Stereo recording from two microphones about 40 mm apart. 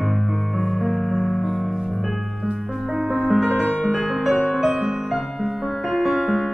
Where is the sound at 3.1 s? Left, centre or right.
Centre.